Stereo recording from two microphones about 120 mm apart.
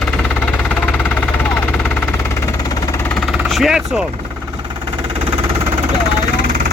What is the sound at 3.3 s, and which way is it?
Vehicle, centre (ahead or behind).